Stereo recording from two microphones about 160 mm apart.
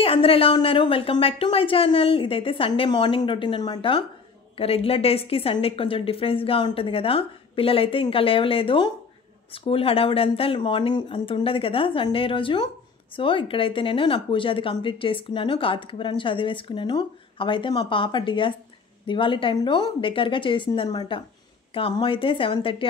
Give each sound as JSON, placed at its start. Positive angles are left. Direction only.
{"t": 0.0, "sound": "speech", "side_deg": 35}